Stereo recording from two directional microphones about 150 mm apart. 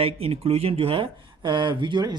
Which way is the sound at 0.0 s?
40° right (ahead or behind).